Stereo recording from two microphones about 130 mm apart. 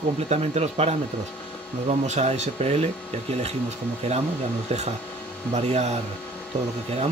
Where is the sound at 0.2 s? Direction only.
55° right (ahead or behind).